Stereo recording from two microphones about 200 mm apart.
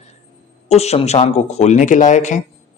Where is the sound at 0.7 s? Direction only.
30° left (ahead or behind).